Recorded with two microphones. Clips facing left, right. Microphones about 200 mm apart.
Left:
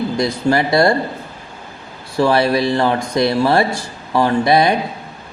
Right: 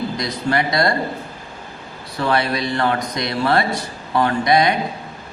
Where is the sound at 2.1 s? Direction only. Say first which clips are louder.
Left 6 dB; 30° left (ahead or behind).